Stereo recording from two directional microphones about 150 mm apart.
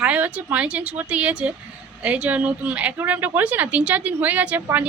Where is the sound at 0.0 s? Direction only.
10° right (ahead or behind).